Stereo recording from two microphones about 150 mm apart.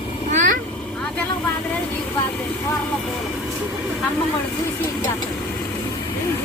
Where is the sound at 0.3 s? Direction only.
55° right (ahead or behind).